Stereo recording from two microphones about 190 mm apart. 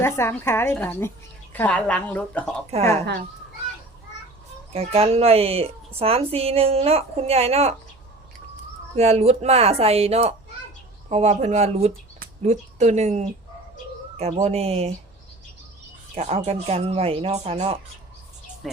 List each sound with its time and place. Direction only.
0.0 s a woman's voice: 10° left (ahead or behind)
4.7 s a woman's voice: 30° right (ahead or behind)
9.0 s a woman's voice: 35° right (ahead or behind)
14.4 s a woman's voice: 30° right (ahead or behind)
16.1 s a woman's voice: 35° right (ahead or behind)
18.6 s music: centre (ahead or behind)